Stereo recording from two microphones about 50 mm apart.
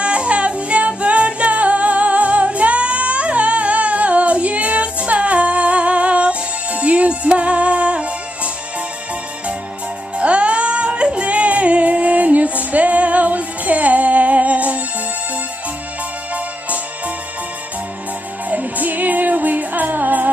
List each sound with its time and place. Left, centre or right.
0.0 s music: right
10.1 s music: right
18.5 s music: right